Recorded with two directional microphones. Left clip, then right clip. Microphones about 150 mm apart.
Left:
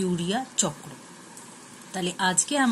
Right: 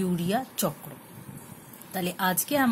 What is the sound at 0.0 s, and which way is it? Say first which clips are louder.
Speech: left 1 dB; 30° right (ahead or behind).